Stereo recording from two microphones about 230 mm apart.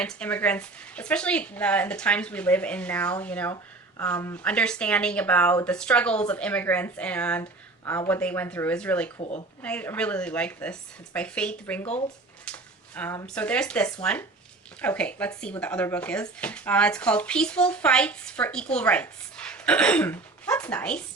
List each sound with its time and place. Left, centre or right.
0.0 s speech: centre
9.1 s speech: left
9.6 s speech: centre